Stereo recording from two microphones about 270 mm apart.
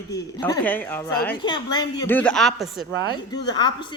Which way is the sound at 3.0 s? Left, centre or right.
Centre.